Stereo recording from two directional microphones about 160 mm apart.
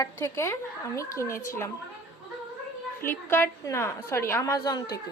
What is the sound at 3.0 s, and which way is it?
A woman's voice, 15° left (ahead or behind).